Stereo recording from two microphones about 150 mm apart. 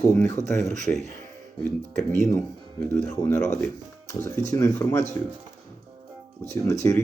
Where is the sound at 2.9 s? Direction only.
15° left (ahead or behind).